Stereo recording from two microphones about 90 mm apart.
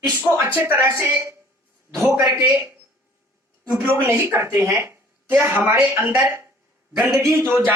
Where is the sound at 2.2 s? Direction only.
40° right (ahead or behind).